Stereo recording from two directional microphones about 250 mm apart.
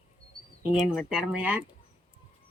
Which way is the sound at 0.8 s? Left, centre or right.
Centre.